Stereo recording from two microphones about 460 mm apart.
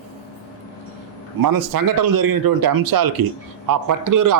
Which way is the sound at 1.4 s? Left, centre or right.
Right.